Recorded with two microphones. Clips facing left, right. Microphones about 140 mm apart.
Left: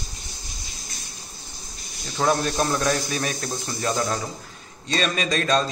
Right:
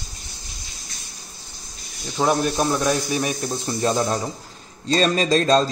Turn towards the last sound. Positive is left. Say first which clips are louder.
# right 5 dB
turn(degrees=-30)  # may be behind; listen again after turning